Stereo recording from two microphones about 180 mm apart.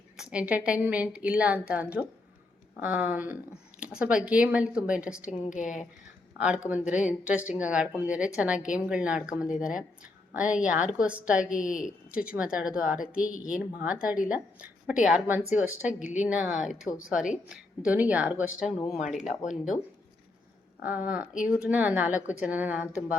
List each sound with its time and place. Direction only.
0.2 s a woman's voice: 5° right (ahead or behind)
5.5 s speech: 45° left (ahead or behind)
6.7 s a woman's voice: 5° right (ahead or behind)
19.2 s speech: 40° left (ahead or behind)
20.8 s a woman's voice: 10° right (ahead or behind)